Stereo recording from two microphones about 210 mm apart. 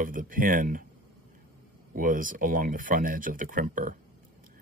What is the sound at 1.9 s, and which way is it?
Speech, 40° right (ahead or behind).